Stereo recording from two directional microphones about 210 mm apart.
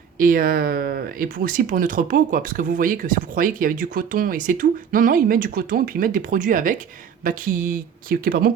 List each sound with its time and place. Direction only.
0.2 s speech: 40° right (ahead or behind)